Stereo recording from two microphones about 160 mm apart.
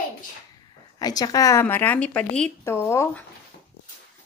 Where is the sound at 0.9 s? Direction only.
25° left (ahead or behind).